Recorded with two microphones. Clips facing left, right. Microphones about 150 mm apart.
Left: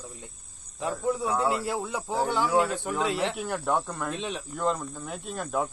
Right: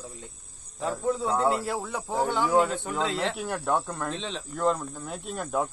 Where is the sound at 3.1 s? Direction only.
20° left (ahead or behind).